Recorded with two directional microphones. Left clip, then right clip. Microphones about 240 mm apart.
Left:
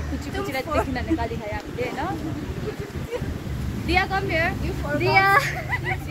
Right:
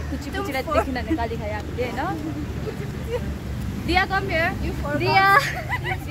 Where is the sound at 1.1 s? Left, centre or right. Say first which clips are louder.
Even; right.